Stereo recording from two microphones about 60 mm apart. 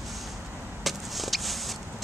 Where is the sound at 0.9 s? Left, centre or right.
Centre.